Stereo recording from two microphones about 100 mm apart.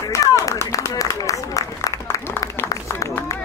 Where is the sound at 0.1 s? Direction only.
30° left (ahead or behind).